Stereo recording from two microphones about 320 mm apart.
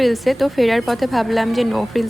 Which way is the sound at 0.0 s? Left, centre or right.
Centre.